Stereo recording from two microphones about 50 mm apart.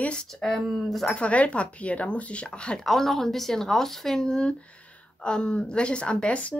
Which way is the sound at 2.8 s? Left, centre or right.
Centre.